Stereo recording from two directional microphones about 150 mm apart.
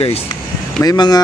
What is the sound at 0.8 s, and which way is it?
Speech, 25° left (ahead or behind).